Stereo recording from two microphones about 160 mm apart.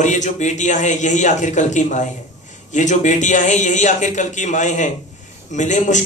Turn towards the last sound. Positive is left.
turn(degrees=50)  # may be behind; listen again after turning